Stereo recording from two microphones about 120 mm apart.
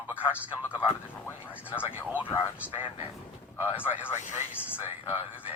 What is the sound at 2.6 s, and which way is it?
Speech, 15° right (ahead or behind).